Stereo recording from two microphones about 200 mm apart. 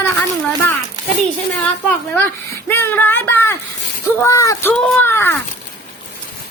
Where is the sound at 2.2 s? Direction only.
10° left (ahead or behind).